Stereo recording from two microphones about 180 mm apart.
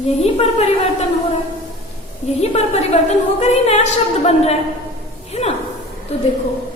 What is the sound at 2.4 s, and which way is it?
A woman's voice, 35° left (ahead or behind).